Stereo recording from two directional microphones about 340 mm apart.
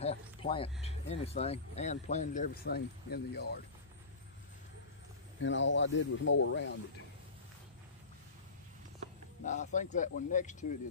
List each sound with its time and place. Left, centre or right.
0.0 s a sound: centre
0.8 s speech: centre
5.4 s speech: left
9.4 s speech: left